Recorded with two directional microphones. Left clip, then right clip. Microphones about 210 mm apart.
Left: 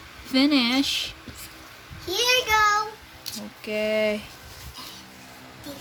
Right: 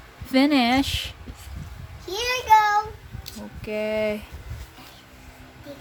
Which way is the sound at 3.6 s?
10° right (ahead or behind).